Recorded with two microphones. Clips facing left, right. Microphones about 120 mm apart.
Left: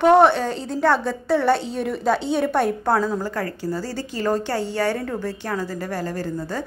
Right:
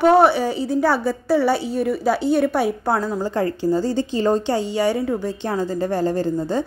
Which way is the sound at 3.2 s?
20° right (ahead or behind).